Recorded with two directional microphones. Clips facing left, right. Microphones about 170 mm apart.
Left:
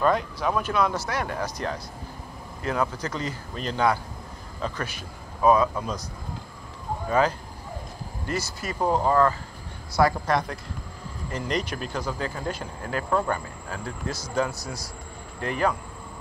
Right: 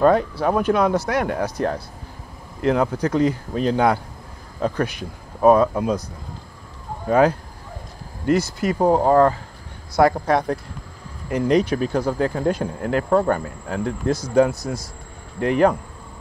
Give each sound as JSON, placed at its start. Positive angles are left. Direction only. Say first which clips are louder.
{"t": 0.0, "sound": "speech", "louder": "right 7 dB", "side_deg": -60}
{"t": 7.1, "sound": "speech", "louder": "right 7 dB", "side_deg": -55}